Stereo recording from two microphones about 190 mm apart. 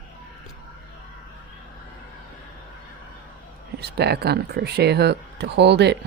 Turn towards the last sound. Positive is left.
turn(degrees=-65)  # may be behind; listen again after turning